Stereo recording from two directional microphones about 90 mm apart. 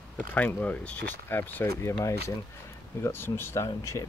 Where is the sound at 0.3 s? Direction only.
20° left (ahead or behind).